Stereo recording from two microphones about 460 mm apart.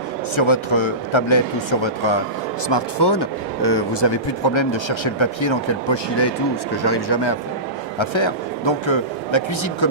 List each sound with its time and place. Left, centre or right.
0.3 s speech: left
2.6 s speech: left
7.9 s a man's voice: left